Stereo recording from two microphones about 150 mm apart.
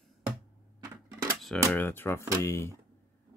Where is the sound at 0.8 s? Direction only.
25° right (ahead or behind).